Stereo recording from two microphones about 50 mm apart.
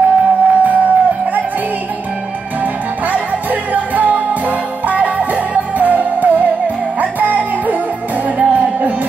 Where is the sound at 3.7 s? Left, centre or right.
Right.